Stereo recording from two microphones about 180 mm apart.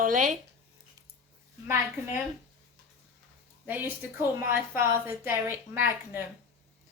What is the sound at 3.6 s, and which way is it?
A woman's voice, 10° right (ahead or behind).